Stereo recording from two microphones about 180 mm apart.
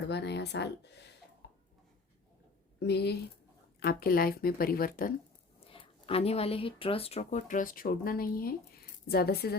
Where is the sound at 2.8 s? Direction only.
65° left (ahead or behind).